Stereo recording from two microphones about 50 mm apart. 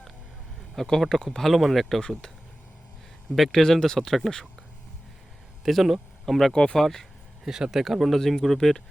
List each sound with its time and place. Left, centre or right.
0.8 s speech: centre
2.0 s speech: centre
3.3 s speech: centre
5.6 s speech: centre
6.5 s speech: centre
6.7 s speech: centre
7.4 s speech: centre